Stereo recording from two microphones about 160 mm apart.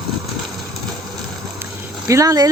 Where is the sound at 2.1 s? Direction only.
20° right (ahead or behind).